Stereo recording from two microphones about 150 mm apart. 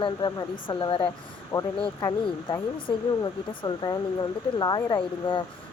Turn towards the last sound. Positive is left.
turn(degrees=30)  # may be behind; listen again after turning